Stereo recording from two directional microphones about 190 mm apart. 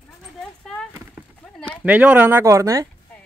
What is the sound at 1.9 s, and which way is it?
Speech, 5° right (ahead or behind).